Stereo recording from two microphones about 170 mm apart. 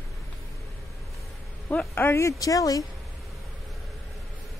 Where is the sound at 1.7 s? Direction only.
10° left (ahead or behind).